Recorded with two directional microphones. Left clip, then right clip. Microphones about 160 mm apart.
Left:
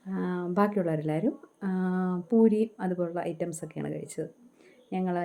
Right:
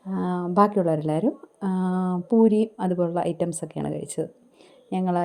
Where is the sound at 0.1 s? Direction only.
25° right (ahead or behind).